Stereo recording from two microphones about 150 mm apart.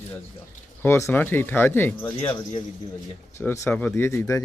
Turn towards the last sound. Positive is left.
turn(degrees=20)  # may be behind; listen again after turning